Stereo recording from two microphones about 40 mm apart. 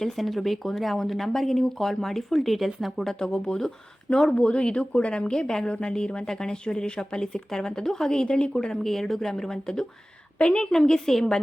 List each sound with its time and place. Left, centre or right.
0.0 s speech: centre
3.2 s speech: centre
10.3 s a woman's voice: left
10.7 s speech: centre